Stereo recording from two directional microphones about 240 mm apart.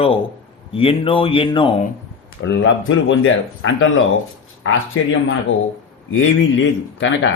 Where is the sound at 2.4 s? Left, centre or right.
Left.